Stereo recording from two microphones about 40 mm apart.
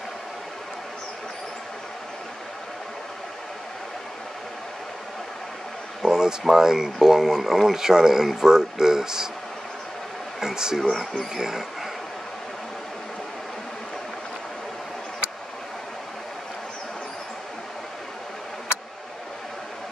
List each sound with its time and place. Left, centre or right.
6.0 s a sound: centre
6.4 s speech: centre
10.4 s speech: centre